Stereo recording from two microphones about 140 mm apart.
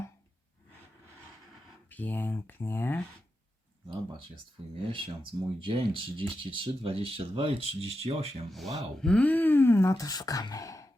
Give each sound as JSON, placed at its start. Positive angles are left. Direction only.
{"t": 1.9, "sound": "speech", "side_deg": 10}
{"t": 4.9, "sound": "speech", "side_deg": -35}
{"t": 8.4, "sound": "speech", "side_deg": 0}